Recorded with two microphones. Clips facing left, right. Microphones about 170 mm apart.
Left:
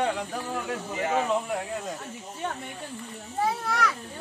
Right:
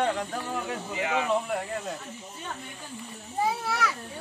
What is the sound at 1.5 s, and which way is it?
Speech, centre (ahead or behind).